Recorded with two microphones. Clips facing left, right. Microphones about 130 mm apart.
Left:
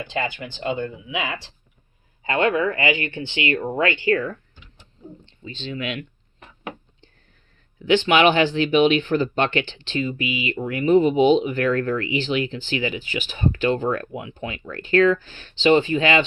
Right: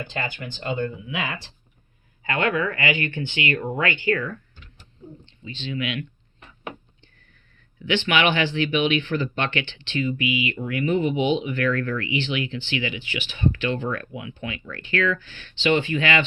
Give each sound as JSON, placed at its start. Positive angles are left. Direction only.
{"t": 0.6, "sound": "speech", "side_deg": 20}
{"t": 5.4, "sound": "speech", "side_deg": 40}
{"t": 8.0, "sound": "speech", "side_deg": 40}